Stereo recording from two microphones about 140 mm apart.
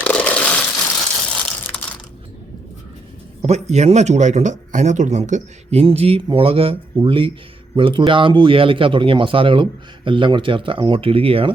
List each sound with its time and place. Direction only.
0.0 s a sound: 10° left (ahead or behind)
1.4 s crushing: 10° left (ahead or behind)
3.4 s speech: 55° right (ahead or behind)
5.8 s a man's voice: 45° right (ahead or behind)